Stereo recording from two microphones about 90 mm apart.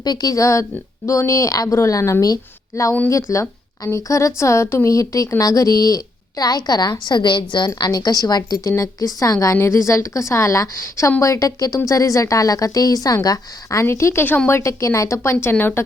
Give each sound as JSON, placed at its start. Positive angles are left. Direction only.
{"t": 0.0, "sound": "a woman's voice", "side_deg": 45}
{"t": 7.8, "sound": "a woman's voice", "side_deg": 45}